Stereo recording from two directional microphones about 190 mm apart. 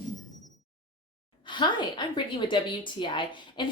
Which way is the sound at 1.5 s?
25° left (ahead or behind).